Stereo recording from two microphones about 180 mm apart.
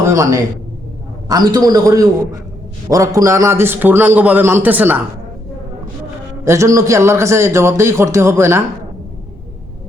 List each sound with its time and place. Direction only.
0.0 s a man's voice: 15° right (ahead or behind)
6.4 s a man's voice: 15° right (ahead or behind)